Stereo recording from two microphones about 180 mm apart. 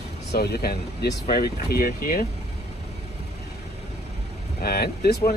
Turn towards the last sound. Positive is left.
turn(degrees=60)  # may be behind; listen again after turning